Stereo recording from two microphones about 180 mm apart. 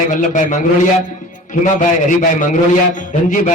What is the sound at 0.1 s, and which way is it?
A man's voice, 45° left (ahead or behind).